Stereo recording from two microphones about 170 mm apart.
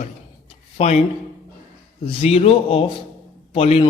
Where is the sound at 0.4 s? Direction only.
40° left (ahead or behind).